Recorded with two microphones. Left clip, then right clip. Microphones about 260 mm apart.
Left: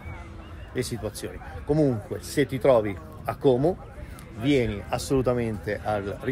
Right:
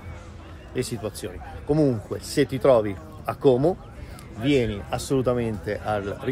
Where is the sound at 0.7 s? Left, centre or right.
Centre.